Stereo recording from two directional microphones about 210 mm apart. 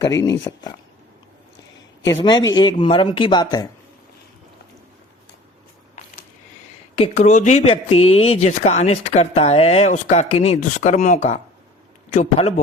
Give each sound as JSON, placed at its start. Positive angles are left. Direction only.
{"t": 0.0, "sound": "speech", "side_deg": 15}
{"t": 2.0, "sound": "speech", "side_deg": 20}
{"t": 6.9, "sound": "speech", "side_deg": 30}